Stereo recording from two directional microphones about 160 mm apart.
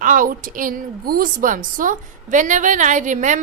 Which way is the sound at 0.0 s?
55° right (ahead or behind).